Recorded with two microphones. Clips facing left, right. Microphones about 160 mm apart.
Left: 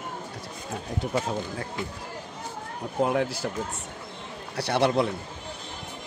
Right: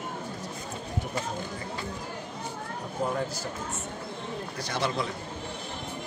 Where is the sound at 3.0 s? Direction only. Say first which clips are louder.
Left 6 dB; 70° left (ahead or behind).